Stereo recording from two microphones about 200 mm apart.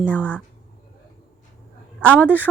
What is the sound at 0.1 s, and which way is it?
Speech, 5° left (ahead or behind).